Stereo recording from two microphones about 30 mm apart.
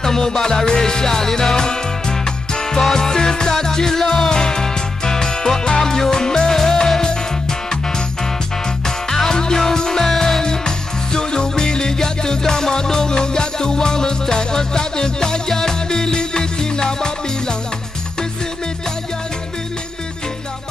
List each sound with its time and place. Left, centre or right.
0.0 s music: centre
2.8 s music: centre
8.8 s music: left